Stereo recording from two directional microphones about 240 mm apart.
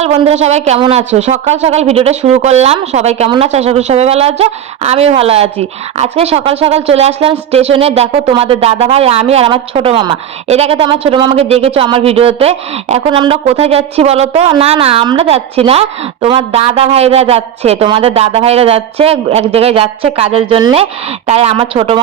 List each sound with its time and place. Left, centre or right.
0.0 s speech: right